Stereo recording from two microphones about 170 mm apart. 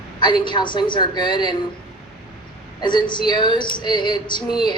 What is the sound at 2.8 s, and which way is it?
A woman's voice, 25° left (ahead or behind).